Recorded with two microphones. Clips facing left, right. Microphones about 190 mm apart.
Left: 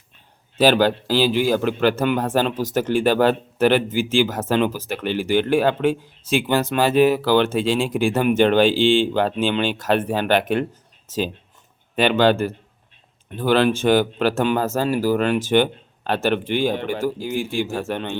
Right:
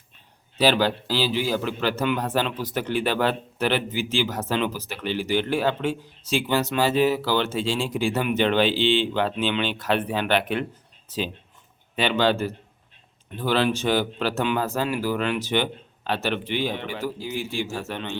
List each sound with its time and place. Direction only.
0.6 s a man's voice: 50° left (ahead or behind)
11.9 s a man's voice: 50° left (ahead or behind)